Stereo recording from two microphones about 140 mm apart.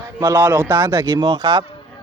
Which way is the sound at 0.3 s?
15° right (ahead or behind).